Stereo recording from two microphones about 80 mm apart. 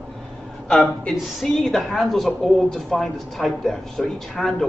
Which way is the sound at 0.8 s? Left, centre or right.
Centre.